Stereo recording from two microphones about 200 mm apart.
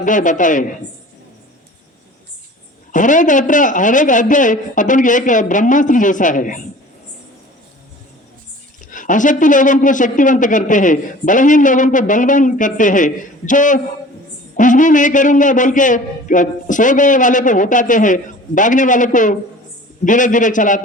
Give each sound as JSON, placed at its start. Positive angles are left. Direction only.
{"t": 0.0, "sound": "speech", "side_deg": 40}
{"t": 2.9, "sound": "speech", "side_deg": 40}
{"t": 8.9, "sound": "speech", "side_deg": 40}